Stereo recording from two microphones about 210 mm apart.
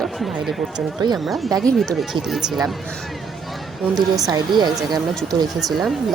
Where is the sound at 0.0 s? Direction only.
Centre (ahead or behind).